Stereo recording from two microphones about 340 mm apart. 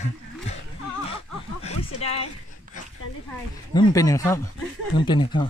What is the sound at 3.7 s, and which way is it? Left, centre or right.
Speech, centre.